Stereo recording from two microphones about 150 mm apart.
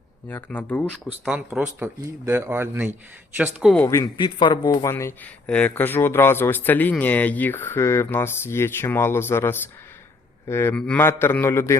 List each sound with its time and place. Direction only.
0.3 s speech: 15° left (ahead or behind)
1.2 s speech: 5° right (ahead or behind)
3.8 s speech: 25° left (ahead or behind)
4.9 s speech: 20° left (ahead or behind)